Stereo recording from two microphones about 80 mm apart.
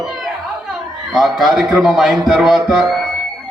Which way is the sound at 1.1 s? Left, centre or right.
Centre.